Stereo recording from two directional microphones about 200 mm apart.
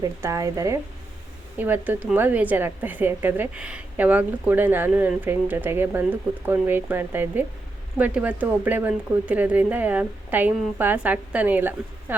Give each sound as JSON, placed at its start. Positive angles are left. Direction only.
{"t": 0.0, "sound": "a woman's voice", "side_deg": -15}